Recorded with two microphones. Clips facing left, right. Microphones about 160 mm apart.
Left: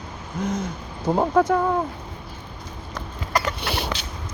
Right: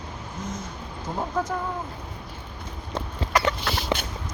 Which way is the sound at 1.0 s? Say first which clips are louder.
Left 9 dB; 65° left (ahead or behind).